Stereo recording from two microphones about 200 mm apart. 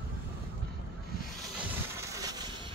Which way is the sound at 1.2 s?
5° right (ahead or behind).